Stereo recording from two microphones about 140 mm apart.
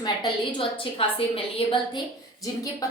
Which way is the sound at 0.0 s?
35° left (ahead or behind).